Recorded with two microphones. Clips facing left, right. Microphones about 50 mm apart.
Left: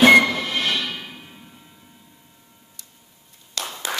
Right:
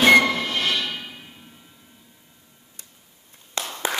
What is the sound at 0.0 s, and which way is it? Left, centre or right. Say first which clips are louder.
Train: left 2 dB; centre.